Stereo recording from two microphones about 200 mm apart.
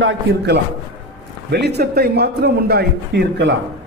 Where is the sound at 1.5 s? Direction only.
55° right (ahead or behind).